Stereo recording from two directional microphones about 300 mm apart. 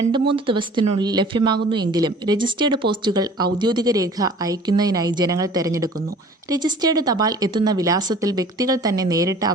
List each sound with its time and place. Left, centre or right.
0.3 s speech: centre